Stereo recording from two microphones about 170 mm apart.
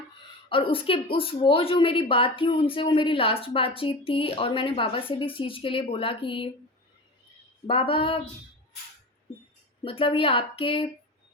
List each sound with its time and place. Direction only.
0.5 s speech: 30° left (ahead or behind)
7.7 s speech: 30° left (ahead or behind)
9.8 s speech: 30° left (ahead or behind)